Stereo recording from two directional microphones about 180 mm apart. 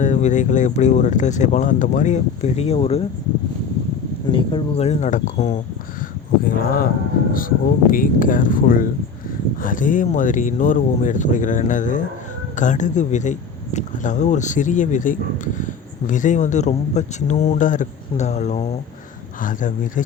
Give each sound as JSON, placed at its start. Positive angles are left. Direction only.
{"t": 0.0, "sound": "speech", "side_deg": 40}
{"t": 4.3, "sound": "speech", "side_deg": 30}
{"t": 6.0, "sound": "speech", "side_deg": 50}